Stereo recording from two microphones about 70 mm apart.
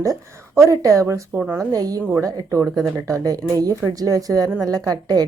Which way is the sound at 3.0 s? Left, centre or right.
Right.